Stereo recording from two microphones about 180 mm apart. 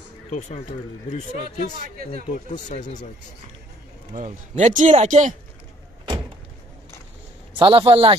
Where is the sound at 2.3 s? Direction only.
45° left (ahead or behind).